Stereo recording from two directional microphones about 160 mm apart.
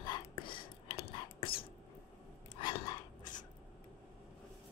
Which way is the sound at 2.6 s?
30° left (ahead or behind).